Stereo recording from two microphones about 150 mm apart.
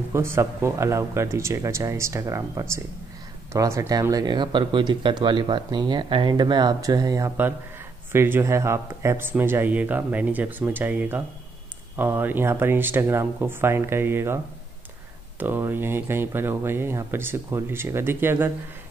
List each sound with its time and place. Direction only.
0.1 s speech: 15° right (ahead or behind)